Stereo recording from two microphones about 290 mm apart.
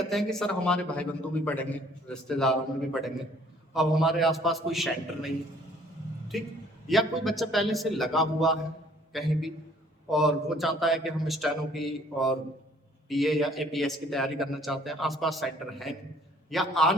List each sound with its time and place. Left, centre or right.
0.0 s a man's voice: centre
6.3 s a man's voice: centre